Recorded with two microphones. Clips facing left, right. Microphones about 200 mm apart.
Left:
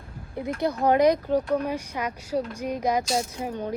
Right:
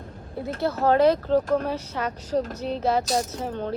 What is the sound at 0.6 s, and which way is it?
Speech, 15° left (ahead or behind).